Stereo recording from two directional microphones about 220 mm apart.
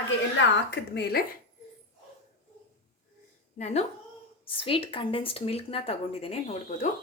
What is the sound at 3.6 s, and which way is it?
Speech, 30° left (ahead or behind).